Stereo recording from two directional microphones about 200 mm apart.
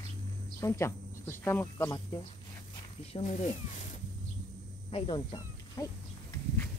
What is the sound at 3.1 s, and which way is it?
Speech, 35° left (ahead or behind).